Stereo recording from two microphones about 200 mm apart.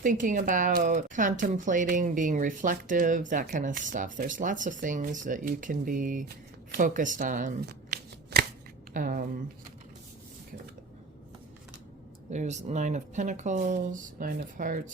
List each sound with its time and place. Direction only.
0.0 s speech: 40° right (ahead or behind)
8.3 s chopping: 55° right (ahead or behind)
8.9 s speech: 45° right (ahead or behind)
12.3 s speech: 35° right (ahead or behind)